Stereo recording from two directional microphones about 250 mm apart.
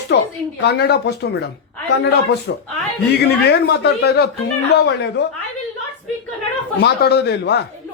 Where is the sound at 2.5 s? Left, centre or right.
Left.